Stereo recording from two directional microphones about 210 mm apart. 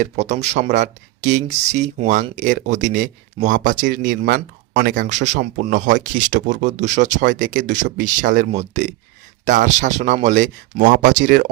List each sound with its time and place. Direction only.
0.0 s speech: 35° right (ahead or behind)